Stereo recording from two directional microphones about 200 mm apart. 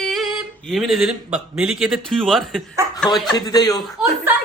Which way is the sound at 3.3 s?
20° left (ahead or behind).